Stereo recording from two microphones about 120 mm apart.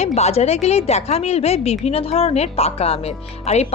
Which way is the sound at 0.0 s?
65° left (ahead or behind).